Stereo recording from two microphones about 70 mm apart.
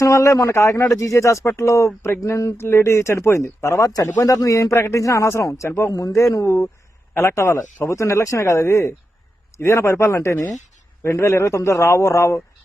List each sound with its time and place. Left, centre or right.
0.0 s speech: left
5.9 s speech: left